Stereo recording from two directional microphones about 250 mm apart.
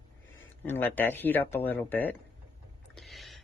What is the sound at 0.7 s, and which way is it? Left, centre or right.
Speech, centre.